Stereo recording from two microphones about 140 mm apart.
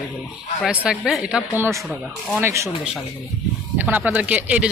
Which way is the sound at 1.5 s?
15° right (ahead or behind).